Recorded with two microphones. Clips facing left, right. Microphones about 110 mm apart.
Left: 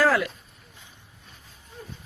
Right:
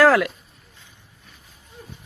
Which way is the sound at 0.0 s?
80° right.